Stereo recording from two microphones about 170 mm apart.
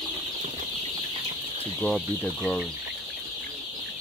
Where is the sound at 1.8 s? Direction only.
5° left (ahead or behind).